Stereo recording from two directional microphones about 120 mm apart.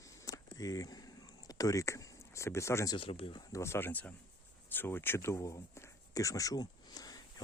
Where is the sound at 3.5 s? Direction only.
20° left (ahead or behind).